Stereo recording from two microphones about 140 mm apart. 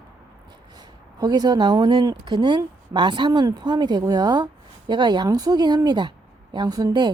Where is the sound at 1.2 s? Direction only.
30° right (ahead or behind).